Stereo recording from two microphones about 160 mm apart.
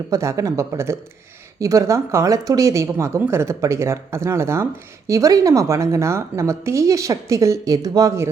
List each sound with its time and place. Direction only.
0.1 s speech: 20° right (ahead or behind)